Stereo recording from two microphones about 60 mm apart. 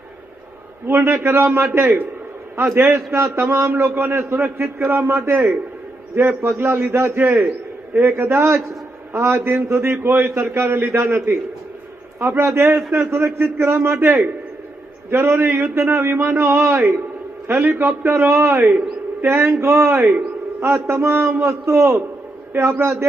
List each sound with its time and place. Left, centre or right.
0.9 s a man's voice: right
7.9 s a man's voice: right
8.2 s a man's voice: right
12.4 s a man's voice: right
17.6 s a man's voice: right
17.8 s a man's voice: right
19.2 s a man's voice: right